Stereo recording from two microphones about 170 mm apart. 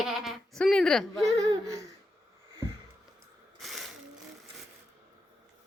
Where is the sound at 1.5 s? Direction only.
20° right (ahead or behind).